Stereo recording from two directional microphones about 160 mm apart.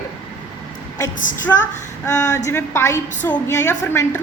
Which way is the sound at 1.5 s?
15° left (ahead or behind).